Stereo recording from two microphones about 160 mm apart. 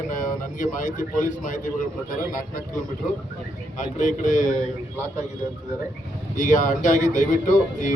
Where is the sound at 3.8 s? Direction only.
55° left (ahead or behind).